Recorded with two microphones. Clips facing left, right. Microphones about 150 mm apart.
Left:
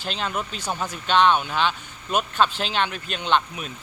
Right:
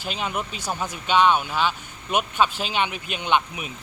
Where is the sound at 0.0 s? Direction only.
10° right (ahead or behind).